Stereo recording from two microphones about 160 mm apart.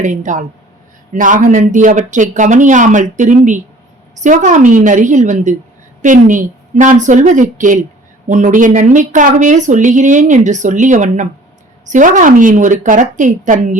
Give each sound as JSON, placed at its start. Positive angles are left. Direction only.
{"t": 0.0, "sound": "speech", "side_deg": -50}